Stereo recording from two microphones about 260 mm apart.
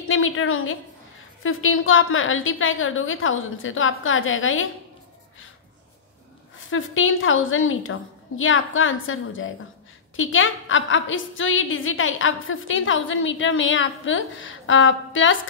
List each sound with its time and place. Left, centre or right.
0.1 s a woman's voice: left
6.7 s a woman's voice: left